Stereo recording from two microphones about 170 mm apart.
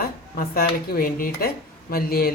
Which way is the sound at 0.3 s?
60° left (ahead or behind).